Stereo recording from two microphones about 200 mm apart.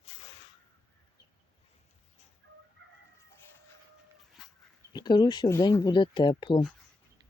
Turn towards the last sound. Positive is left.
turn(degrees=25)  # may be behind; listen again after turning